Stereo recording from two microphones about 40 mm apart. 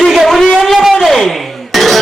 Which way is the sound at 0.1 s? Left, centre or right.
Centre.